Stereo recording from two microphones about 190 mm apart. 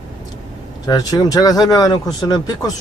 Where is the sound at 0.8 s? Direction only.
20° left (ahead or behind).